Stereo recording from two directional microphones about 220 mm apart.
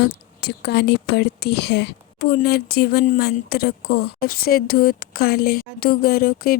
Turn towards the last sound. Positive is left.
turn(degrees=45)  # may be behind; listen again after turning